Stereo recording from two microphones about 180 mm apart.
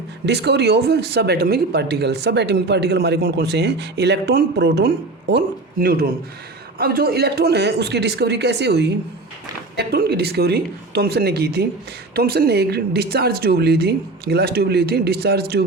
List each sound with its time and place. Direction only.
0.3 s speech: 70° right (ahead or behind)
5.8 s speech: 55° right (ahead or behind)